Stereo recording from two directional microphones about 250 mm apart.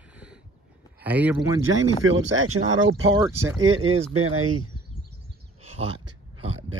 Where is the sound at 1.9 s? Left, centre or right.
Right.